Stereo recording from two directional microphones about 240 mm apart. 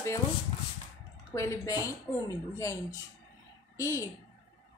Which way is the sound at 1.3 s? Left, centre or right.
Centre.